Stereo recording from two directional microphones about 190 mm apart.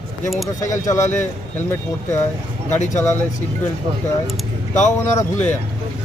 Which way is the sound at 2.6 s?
40° left (ahead or behind).